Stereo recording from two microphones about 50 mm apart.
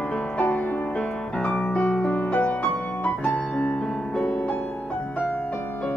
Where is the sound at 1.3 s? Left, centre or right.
Centre.